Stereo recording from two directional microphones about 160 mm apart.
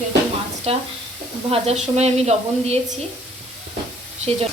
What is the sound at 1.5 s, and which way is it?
A woman's voice, 40° right (ahead or behind).